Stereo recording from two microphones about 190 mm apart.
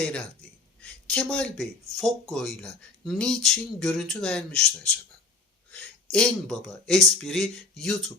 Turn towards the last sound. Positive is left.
turn(degrees=0)  # may be behind; listen again after turning